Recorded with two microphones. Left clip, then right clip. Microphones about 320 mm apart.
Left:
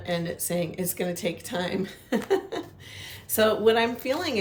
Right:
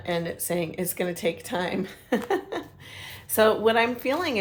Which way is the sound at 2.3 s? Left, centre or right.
Centre.